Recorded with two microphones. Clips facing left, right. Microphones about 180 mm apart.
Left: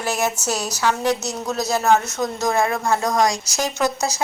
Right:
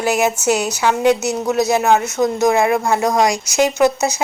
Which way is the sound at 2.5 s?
10° right (ahead or behind).